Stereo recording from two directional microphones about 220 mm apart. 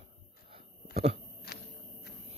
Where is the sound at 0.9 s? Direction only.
30° right (ahead or behind).